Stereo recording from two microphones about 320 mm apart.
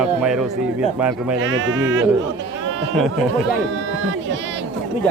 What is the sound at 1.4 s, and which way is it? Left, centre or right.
Speech, right.